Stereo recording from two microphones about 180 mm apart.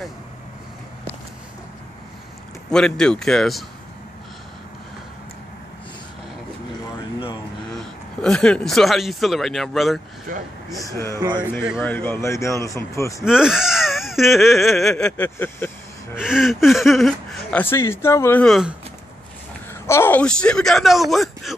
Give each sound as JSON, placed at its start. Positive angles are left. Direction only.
{"t": 2.7, "sound": "speech", "side_deg": 5}
{"t": 7.7, "sound": "speech", "side_deg": 5}
{"t": 10.3, "sound": "speech", "side_deg": -50}
{"t": 10.8, "sound": "speech", "side_deg": 15}
{"t": 11.1, "sound": "speech", "side_deg": -25}
{"t": 11.8, "sound": "speech", "side_deg": 10}
{"t": 13.2, "sound": "speech", "side_deg": -5}
{"t": 16.2, "sound": "speech", "side_deg": -5}
{"t": 19.7, "sound": "speech", "side_deg": 15}